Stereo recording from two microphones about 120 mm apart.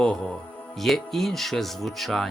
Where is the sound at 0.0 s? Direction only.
10° left (ahead or behind).